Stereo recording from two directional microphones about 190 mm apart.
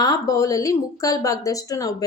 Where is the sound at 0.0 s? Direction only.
20° left (ahead or behind).